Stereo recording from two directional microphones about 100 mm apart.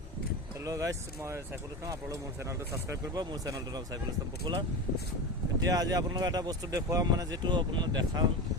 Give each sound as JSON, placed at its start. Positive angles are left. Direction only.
{"t": 0.6, "sound": "speech", "side_deg": -35}
{"t": 2.9, "sound": "speech", "side_deg": -35}
{"t": 4.5, "sound": "speech", "side_deg": -50}
{"t": 5.6, "sound": "speech", "side_deg": -40}